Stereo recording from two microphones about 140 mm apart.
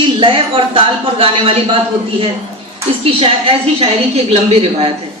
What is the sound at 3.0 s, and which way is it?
Speech, 40° right (ahead or behind).